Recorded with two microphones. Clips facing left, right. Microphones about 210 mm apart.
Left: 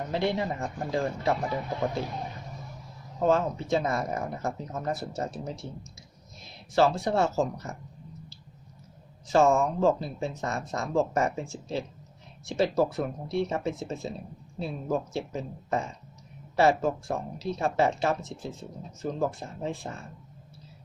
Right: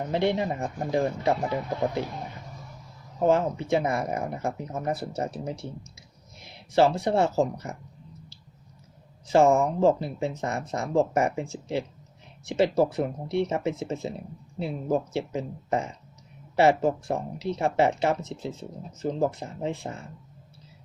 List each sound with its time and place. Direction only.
0.1 s speech: 20° right (ahead or behind)
3.2 s speech: 15° right (ahead or behind)
9.2 s speech: 15° right (ahead or behind)